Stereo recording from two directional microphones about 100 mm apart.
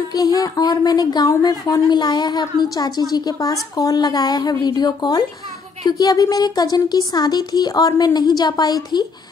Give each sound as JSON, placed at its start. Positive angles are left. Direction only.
{"t": 0.1, "sound": "a child's voice", "side_deg": 40}